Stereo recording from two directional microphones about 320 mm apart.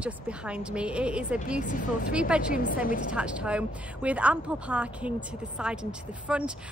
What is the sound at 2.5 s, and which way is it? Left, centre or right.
Speech, left.